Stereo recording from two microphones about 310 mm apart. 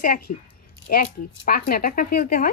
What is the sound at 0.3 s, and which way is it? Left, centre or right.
Speech, left.